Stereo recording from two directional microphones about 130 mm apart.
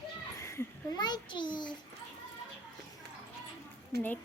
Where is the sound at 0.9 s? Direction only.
35° left (ahead or behind).